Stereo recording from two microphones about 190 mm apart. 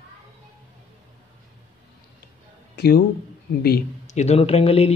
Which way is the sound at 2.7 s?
55° left (ahead or behind).